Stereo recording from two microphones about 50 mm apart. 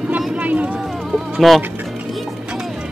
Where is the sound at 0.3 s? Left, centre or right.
Right.